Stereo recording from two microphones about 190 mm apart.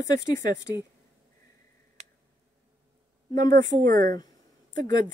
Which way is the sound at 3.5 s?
50° right (ahead or behind).